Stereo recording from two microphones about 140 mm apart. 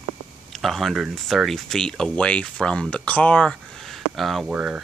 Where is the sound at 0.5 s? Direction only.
Centre (ahead or behind).